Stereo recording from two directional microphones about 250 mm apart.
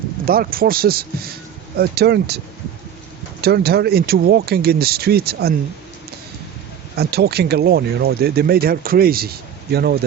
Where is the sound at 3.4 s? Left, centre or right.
Right.